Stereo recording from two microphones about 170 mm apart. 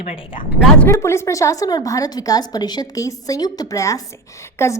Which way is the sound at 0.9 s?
15° left (ahead or behind).